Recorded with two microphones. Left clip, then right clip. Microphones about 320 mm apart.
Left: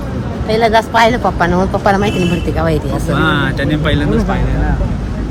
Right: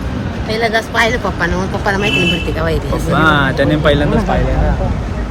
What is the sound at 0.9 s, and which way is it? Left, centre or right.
Speech, left.